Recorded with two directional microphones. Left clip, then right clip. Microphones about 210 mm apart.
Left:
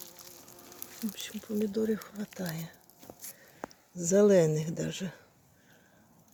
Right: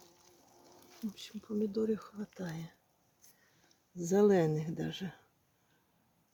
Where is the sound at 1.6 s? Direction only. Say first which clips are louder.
Left 3 dB; 5° right (ahead or behind).